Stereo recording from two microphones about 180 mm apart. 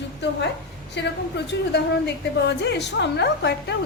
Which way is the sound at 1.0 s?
75° left (ahead or behind).